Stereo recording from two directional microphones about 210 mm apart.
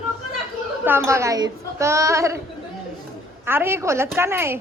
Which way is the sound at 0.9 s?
10° right (ahead or behind).